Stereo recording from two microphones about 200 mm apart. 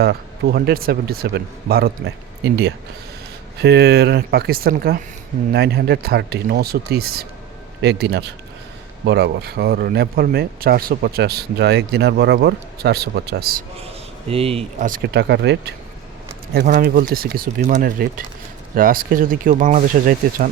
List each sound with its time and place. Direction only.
0.0 s speech: 55° right (ahead or behind)
13.7 s a man's voice: 30° right (ahead or behind)
14.8 s speech: 50° right (ahead or behind)
16.6 s speech: 45° right (ahead or behind)